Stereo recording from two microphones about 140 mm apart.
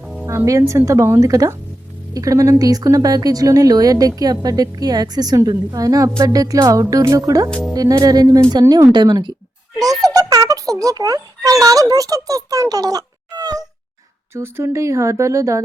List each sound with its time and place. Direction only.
0.0 s music: centre (ahead or behind)
0.3 s a child's voice: 20° right (ahead or behind)